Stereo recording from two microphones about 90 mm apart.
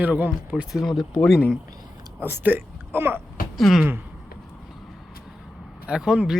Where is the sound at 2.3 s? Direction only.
20° right (ahead or behind).